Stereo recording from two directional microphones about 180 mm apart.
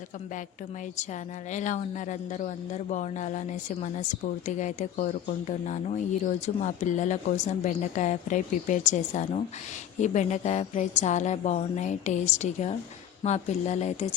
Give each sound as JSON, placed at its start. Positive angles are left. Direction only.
{"t": 1.5, "sound": "a woman's voice", "side_deg": 45}